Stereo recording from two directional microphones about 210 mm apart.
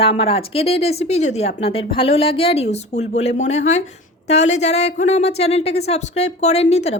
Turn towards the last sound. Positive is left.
turn(degrees=30)  # may be behind; listen again after turning